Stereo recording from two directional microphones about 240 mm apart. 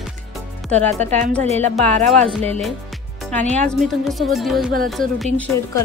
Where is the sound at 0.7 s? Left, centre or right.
Right.